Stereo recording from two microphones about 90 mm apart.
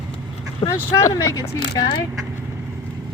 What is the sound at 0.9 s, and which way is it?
Speech, 30° left (ahead or behind).